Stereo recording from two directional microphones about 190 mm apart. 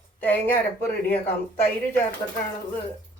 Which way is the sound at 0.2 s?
10° left (ahead or behind).